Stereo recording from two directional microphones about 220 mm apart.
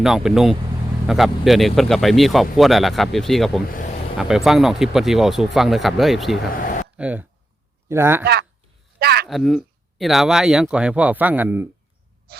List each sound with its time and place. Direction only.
0.0 s speech: centre (ahead or behind)
8.2 s speech: 45° right (ahead or behind)
9.0 s a sound: 45° right (ahead or behind)
9.3 s speech: centre (ahead or behind)